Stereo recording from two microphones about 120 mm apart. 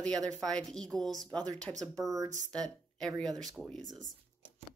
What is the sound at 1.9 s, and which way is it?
Speech, 25° right (ahead or behind).